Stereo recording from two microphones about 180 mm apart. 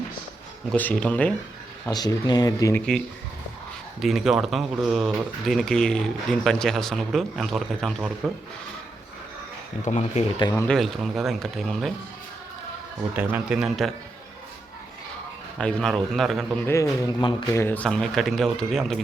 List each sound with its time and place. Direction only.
0.7 s speech: 10° left (ahead or behind)
1.9 s speech: 20° left (ahead or behind)
4.0 s speech: centre (ahead or behind)
9.8 s speech: 40° left (ahead or behind)
10.5 s speech: 5° left (ahead or behind)
13.1 s speech: 10° right (ahead or behind)
15.5 s speech: 5° left (ahead or behind)
16.6 s speech: 15° left (ahead or behind); by 18.9 s centre (ahead or behind)